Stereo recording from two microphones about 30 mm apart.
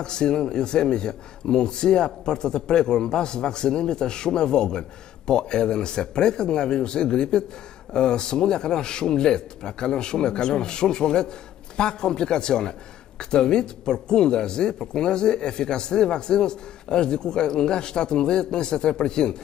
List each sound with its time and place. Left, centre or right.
0.0 s speech: left